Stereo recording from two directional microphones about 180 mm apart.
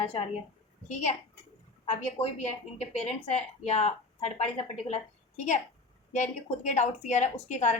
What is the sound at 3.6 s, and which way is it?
A woman's voice, 35° left (ahead or behind).